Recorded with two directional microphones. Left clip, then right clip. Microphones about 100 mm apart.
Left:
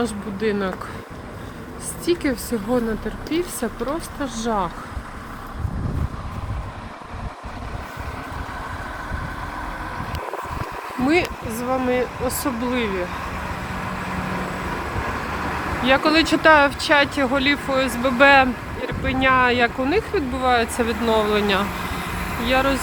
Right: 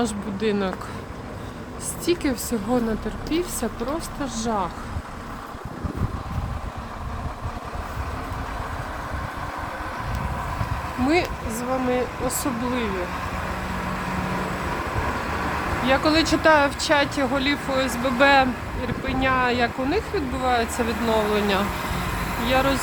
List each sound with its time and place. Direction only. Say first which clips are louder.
0.3 s speech: left 1 dB; 15° right (ahead or behind)
2.0 s speech: left 2 dB; 15° right (ahead or behind)
4.2 s speech: left 3 dB; 10° left (ahead or behind)
11.9 s speech: left 2 dB; 5° left (ahead or behind)
15.8 s speech: left 3 dB; 5° left (ahead or behind)
19.0 s speech: left 5 dB; 20° left (ahead or behind)
20.7 s speech: left 3 dB; 5° left (ahead or behind)
22.4 s speech: left 2 dB; 10° right (ahead or behind)